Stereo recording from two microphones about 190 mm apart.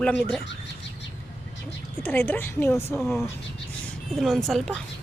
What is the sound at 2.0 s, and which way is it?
Speech, 10° left (ahead or behind).